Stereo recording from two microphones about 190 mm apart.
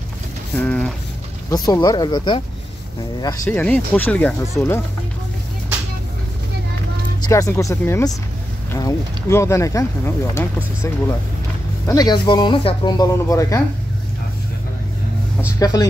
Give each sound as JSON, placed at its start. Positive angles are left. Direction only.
{"t": 0.6, "sound": "speech", "side_deg": 5}
{"t": 1.5, "sound": "speech", "side_deg": 20}
{"t": 3.4, "sound": "speech", "side_deg": 10}
{"t": 7.2, "sound": "speech", "side_deg": 15}
{"t": 15.6, "sound": "speech", "side_deg": 20}